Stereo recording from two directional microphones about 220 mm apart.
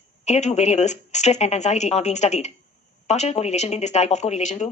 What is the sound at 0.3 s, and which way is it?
Speech, 30° left (ahead or behind).